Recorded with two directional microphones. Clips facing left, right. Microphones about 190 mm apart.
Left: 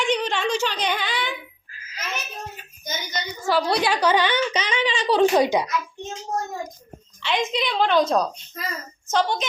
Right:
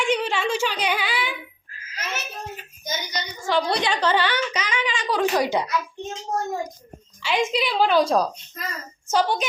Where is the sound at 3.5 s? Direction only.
5° left (ahead or behind); by 5.5 s 25° left (ahead or behind).